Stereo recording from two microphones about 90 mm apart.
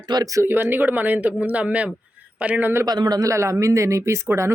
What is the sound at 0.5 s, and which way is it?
Speech, 25° right (ahead or behind).